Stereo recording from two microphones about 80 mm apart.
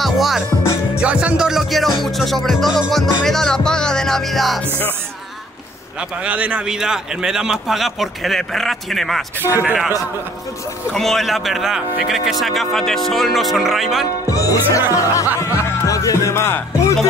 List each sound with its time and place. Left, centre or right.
0.0 s music: centre
0.9 s music: centre
2.9 s speech: centre
5.9 s a man's voice: centre
10.9 s speech: centre
14.0 s speech: left